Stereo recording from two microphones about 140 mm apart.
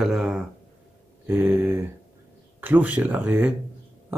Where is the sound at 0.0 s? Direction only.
5° right (ahead or behind).